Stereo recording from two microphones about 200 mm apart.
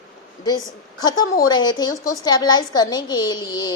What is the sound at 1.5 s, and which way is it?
A woman's voice, 20° left (ahead or behind).